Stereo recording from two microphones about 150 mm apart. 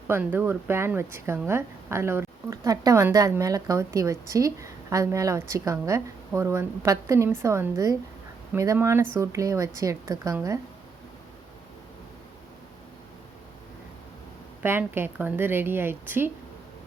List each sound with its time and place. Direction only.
0.1 s speech: 15° right (ahead or behind)
14.6 s a woman's voice: 15° right (ahead or behind)